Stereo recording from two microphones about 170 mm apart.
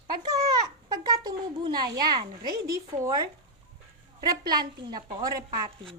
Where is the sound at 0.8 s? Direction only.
25° right (ahead or behind).